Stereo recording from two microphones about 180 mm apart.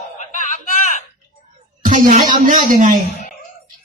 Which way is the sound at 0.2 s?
45° left (ahead or behind).